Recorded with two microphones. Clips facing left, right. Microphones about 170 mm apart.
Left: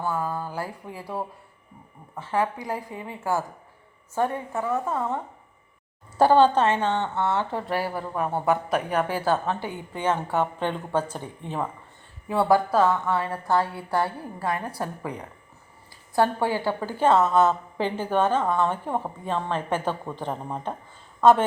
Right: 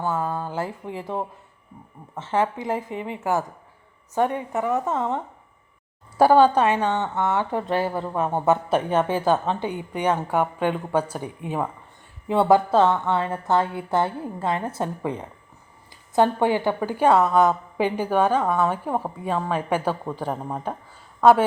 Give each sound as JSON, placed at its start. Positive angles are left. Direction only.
{"t": 0.0, "sound": "a woman's voice", "side_deg": -25}
{"t": 6.1, "sound": "a woman's voice", "side_deg": -10}
{"t": 12.3, "sound": "a woman's voice", "side_deg": -20}